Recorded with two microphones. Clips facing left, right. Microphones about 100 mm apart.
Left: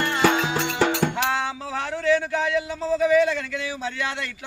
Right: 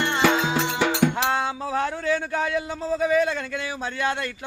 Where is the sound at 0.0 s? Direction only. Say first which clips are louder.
Even; 30° right (ahead or behind).